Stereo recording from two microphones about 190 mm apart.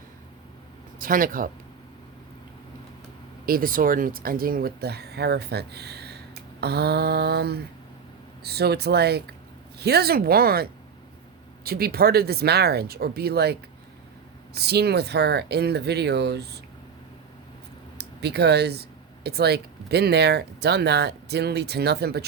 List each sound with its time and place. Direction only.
0.9 s speech: 45° right (ahead or behind)
3.4 s speech: 50° right (ahead or behind)
17.9 s speech: 60° right (ahead or behind)